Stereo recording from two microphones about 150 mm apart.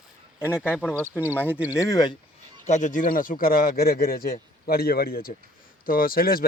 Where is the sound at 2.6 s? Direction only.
55° left (ahead or behind); by 6.5 s 75° left (ahead or behind).